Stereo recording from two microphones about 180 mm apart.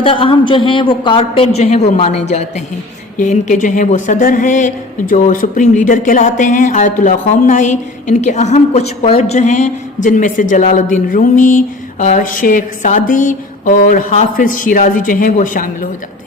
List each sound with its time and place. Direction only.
0.0 s a man's voice: 30° left (ahead or behind); by 15.9 s 50° left (ahead or behind)